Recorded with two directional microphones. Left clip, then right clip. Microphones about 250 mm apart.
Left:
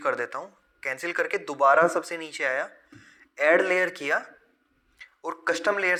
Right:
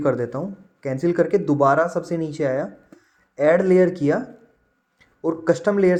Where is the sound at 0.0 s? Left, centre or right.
Left.